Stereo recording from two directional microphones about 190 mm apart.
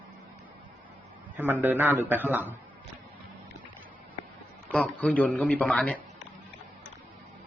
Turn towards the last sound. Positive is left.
turn(degrees=5)  # may be behind; listen again after turning